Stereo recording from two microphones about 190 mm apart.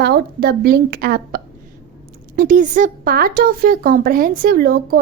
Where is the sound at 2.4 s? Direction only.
45° right (ahead or behind).